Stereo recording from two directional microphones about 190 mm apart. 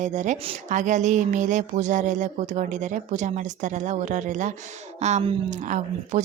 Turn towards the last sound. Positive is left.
turn(degrees=-40)  # may be behind; listen again after turning